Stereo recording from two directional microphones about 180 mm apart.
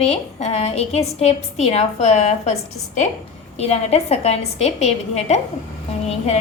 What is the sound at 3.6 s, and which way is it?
Speech, 35° left (ahead or behind).